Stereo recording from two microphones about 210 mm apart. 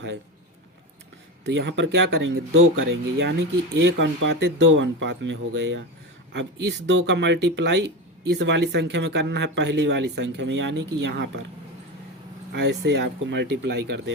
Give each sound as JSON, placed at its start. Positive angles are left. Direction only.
{"t": 1.5, "sound": "speech", "side_deg": -60}
{"t": 12.5, "sound": "speech", "side_deg": -55}